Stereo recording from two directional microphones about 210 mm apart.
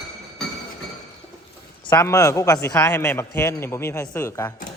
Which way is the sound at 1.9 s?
15° left (ahead or behind).